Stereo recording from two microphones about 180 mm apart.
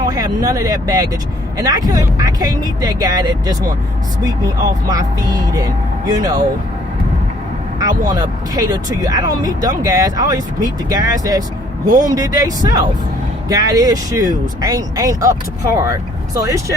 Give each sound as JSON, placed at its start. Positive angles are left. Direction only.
{"t": 0.0, "sound": "speech", "side_deg": -20}
{"t": 7.8, "sound": "speech", "side_deg": -20}
{"t": 16.4, "sound": "speech", "side_deg": -15}